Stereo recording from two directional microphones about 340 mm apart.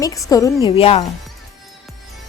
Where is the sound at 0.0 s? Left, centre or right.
Centre.